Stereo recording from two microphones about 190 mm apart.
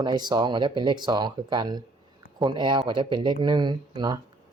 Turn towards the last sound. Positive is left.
turn(degrees=-20)  # may be behind; listen again after turning